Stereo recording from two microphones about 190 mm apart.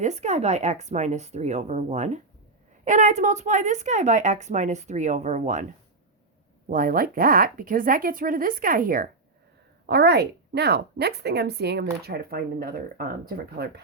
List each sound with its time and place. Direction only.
0.0 s a woman's voice: 35° right (ahead or behind)
6.7 s speech: 45° right (ahead or behind)
9.9 s a woman's voice: 60° right (ahead or behind)